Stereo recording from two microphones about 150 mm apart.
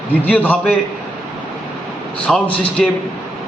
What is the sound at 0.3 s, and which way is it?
Speech, 10° left (ahead or behind).